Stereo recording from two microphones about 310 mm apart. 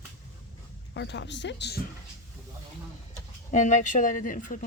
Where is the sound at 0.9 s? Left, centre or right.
Left.